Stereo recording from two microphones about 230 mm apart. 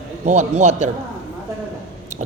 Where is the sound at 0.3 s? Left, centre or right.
Right.